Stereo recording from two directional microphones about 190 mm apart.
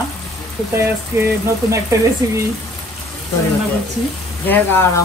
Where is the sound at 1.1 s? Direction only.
15° right (ahead or behind).